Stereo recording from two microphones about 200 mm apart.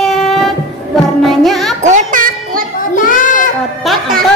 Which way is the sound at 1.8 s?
40° right (ahead or behind).